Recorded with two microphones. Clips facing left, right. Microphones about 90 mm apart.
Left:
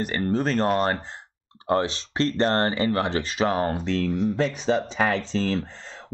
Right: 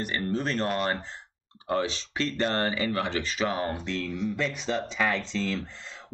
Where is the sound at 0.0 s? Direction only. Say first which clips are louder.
Left 5 dB; 40° left (ahead or behind).